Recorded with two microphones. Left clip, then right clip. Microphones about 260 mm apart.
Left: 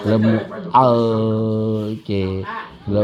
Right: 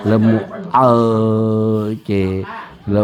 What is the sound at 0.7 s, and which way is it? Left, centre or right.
Speech, right.